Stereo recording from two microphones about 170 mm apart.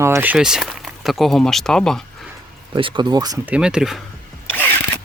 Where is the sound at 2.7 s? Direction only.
30° right (ahead or behind).